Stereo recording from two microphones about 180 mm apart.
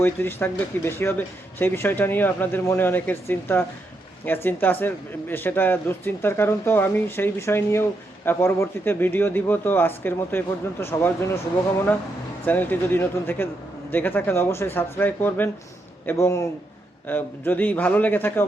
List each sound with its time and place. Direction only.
0.0 s speech: 10° left (ahead or behind)
12.5 s speech: 10° left (ahead or behind)